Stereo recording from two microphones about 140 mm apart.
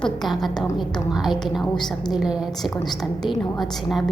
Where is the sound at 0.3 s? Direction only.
Centre (ahead or behind).